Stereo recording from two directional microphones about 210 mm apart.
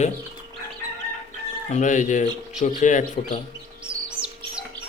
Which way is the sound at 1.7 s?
35° left (ahead or behind).